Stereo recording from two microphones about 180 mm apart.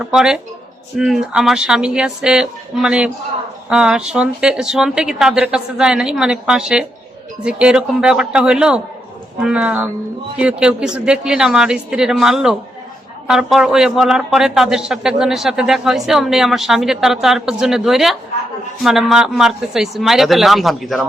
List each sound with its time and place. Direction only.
0.0 s a man's voice: 5° right (ahead or behind)